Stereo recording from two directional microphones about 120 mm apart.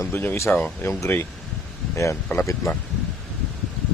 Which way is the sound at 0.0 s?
20° left (ahead or behind).